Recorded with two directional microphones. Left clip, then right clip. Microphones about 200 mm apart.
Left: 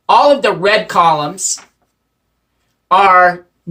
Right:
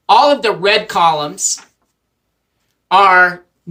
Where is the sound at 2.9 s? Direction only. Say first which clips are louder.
Left 1 dB; 20° left (ahead or behind).